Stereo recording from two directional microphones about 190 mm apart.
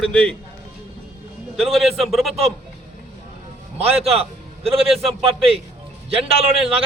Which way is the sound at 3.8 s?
30° right (ahead or behind).